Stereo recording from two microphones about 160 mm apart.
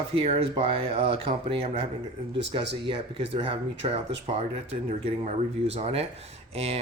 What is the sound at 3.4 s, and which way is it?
Speech, 35° right (ahead or behind).